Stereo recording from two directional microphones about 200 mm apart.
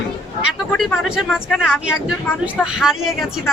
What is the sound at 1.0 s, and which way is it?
A woman's voice, 5° right (ahead or behind).